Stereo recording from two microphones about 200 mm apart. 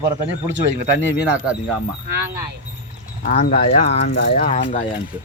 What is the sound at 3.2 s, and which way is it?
Speech, 45° left (ahead or behind).